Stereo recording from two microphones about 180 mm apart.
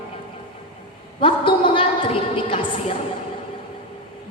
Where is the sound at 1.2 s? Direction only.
30° left (ahead or behind).